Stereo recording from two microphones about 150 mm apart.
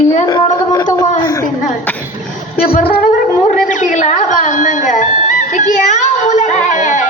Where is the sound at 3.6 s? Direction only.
55° left (ahead or behind).